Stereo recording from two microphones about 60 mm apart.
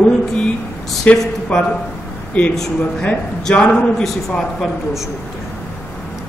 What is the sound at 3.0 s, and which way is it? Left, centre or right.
A man's voice, centre.